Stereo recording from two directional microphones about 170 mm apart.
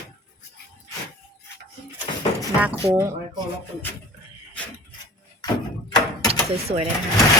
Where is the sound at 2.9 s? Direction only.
15° right (ahead or behind).